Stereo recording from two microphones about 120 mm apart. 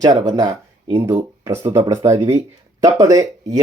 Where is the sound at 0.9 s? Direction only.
20° right (ahead or behind).